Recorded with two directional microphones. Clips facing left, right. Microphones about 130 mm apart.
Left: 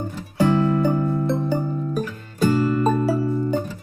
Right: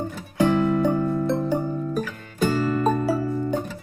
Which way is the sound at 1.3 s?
Centre (ahead or behind).